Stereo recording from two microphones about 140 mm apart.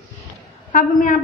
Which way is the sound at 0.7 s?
70° left (ahead or behind).